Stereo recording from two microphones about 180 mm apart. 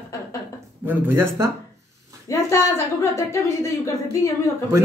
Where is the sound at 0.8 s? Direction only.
10° right (ahead or behind).